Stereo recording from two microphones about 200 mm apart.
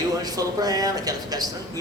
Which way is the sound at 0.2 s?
20° right (ahead or behind).